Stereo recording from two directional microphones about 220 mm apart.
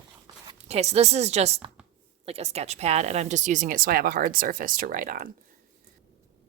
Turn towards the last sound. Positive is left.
turn(degrees=-40)  # may be behind; listen again after turning